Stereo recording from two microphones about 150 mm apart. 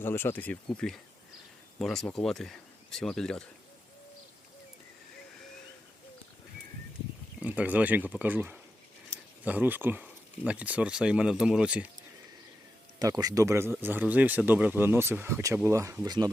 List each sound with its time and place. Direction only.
0.0 s speech: 15° left (ahead or behind)
7.3 s speech: 10° right (ahead or behind)
13.0 s speech: 25° right (ahead or behind)